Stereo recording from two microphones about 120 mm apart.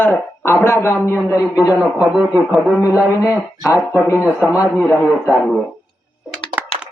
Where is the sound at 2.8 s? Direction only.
25° left (ahead or behind).